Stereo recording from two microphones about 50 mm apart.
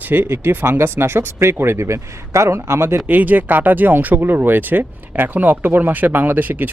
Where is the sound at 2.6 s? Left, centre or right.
Right.